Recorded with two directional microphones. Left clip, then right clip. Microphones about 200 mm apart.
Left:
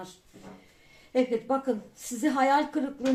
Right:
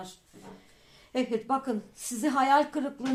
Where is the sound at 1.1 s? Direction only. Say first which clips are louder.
Left 2 dB; 35° right (ahead or behind).